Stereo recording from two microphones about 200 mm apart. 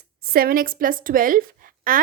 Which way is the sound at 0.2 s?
50° right (ahead or behind).